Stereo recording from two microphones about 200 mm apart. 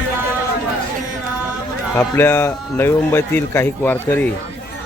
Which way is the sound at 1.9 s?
10° left (ahead or behind).